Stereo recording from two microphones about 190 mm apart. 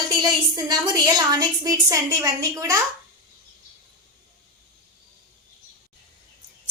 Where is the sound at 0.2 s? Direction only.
20° right (ahead or behind).